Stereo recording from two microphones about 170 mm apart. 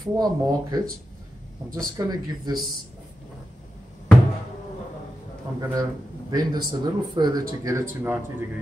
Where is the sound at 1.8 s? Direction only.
20° right (ahead or behind).